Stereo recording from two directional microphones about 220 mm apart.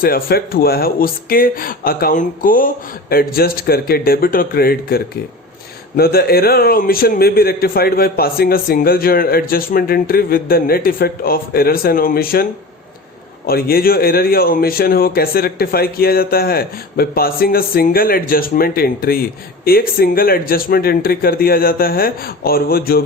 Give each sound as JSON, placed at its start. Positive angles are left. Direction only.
{"t": 0.0, "sound": "a man's voice", "side_deg": 45}
{"t": 13.5, "sound": "a man's voice", "side_deg": 45}